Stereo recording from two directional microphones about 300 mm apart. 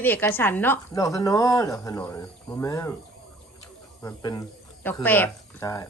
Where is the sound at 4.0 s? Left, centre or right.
Centre.